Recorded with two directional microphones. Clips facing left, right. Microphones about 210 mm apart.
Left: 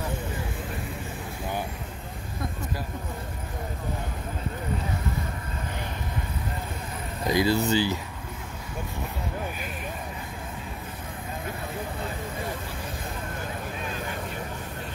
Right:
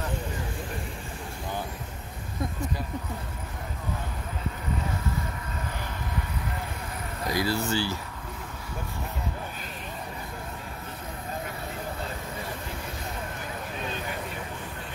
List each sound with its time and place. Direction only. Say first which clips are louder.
7.2 s speech: left 5 dB; 20° left (ahead or behind)